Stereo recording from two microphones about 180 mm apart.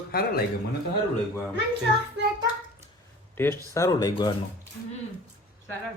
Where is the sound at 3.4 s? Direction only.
15° left (ahead or behind).